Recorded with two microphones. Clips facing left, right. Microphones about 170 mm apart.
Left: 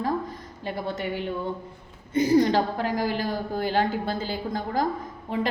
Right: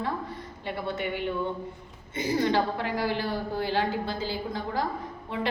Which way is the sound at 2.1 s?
45° left (ahead or behind).